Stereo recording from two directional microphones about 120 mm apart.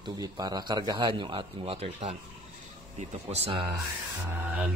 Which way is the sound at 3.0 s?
65° right (ahead or behind).